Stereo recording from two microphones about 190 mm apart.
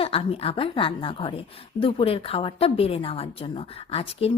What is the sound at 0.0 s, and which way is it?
A woman's voice, 30° left (ahead or behind).